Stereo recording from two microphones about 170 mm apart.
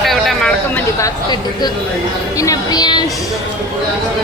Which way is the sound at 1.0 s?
25° left (ahead or behind).